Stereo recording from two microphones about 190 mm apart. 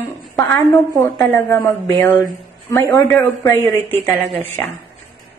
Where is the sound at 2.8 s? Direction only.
15° left (ahead or behind).